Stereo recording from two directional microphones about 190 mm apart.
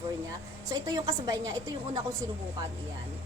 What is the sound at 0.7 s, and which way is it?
A woman's voice, 20° right (ahead or behind).